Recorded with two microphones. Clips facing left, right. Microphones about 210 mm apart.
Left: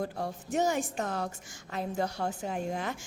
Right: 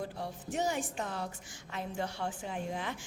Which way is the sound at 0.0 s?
45° left (ahead or behind).